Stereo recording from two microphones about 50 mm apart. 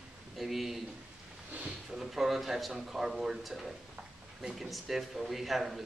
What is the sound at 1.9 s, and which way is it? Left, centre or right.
Speech, centre.